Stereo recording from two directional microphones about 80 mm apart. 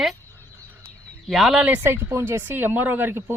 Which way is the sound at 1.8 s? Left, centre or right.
Right.